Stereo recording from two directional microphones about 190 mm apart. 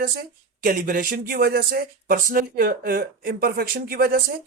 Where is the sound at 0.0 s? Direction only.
50° right (ahead or behind).